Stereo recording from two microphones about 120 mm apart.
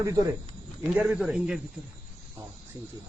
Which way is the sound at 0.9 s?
10° right (ahead or behind).